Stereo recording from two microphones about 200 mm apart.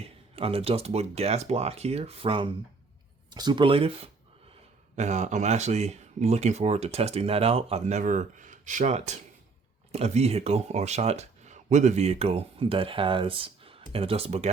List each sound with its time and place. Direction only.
0.0 s speech: 30° right (ahead or behind)